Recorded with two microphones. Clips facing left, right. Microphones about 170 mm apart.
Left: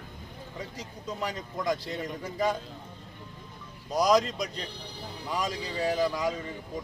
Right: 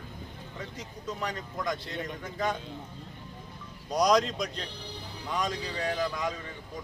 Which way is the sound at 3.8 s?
Centre (ahead or behind).